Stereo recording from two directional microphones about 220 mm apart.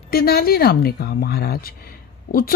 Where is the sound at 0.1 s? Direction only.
45° left (ahead or behind).